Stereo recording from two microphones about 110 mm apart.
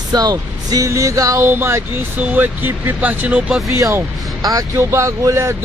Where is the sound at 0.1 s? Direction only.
35° right (ahead or behind); by 3.5 s 15° right (ahead or behind).